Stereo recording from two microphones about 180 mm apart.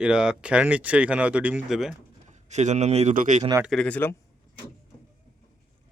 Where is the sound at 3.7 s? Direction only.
5° left (ahead or behind).